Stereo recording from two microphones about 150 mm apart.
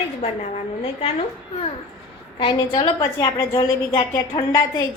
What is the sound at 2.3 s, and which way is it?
A woman's voice, 30° left (ahead or behind).